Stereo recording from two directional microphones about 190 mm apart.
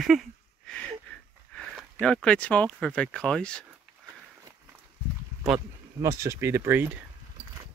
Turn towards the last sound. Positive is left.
turn(degrees=-10)  # may be behind; listen again after turning